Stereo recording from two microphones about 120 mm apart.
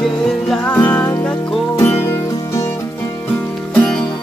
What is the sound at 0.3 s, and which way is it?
Music, 5° left (ahead or behind).